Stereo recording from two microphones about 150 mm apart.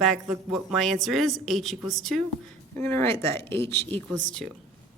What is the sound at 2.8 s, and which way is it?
Speech, 15° left (ahead or behind).